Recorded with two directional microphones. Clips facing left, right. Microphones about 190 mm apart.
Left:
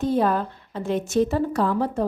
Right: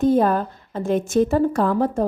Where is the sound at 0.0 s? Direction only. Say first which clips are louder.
Right 4 dB; 45° right (ahead or behind).